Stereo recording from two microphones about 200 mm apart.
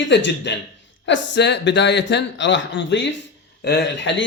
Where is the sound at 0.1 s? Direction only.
60° left (ahead or behind).